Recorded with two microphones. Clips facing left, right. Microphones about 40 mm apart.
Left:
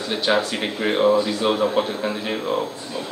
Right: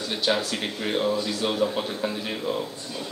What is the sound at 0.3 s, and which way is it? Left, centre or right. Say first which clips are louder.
A man's voice: left 5 dB; centre.